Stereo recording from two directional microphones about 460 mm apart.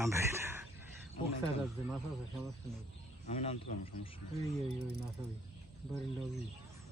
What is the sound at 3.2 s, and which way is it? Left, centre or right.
Speech, centre.